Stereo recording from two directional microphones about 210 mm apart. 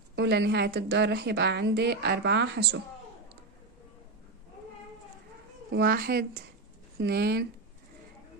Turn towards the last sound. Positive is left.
turn(degrees=-50)  # may be behind; listen again after turning